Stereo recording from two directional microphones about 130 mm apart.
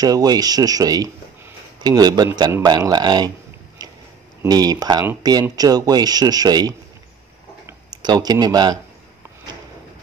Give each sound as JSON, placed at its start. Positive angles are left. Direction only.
{"t": 0.0, "sound": "speech", "side_deg": -30}
{"t": 4.5, "sound": "speech", "side_deg": -30}
{"t": 7.9, "sound": "speech", "side_deg": -35}